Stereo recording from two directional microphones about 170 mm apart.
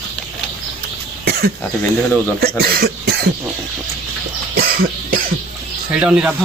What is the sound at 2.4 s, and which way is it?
Speech, 65° right (ahead or behind).